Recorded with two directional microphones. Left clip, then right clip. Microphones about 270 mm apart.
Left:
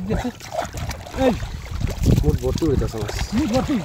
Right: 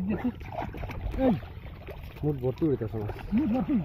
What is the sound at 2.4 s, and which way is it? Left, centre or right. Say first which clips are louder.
Speech: left 6 dB; centre.